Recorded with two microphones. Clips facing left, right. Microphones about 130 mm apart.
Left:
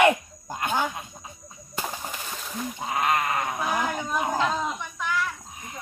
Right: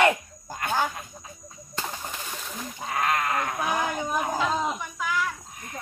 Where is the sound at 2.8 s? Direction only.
20° left (ahead or behind).